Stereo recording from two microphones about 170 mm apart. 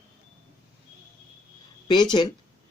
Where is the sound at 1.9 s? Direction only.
25° left (ahead or behind).